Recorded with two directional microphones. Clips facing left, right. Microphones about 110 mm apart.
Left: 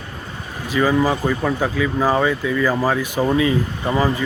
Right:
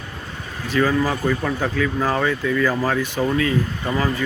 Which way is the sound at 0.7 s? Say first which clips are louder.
Left 2 dB; 10° left (ahead or behind).